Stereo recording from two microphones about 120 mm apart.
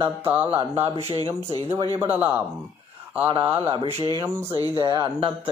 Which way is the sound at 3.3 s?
50° right (ahead or behind).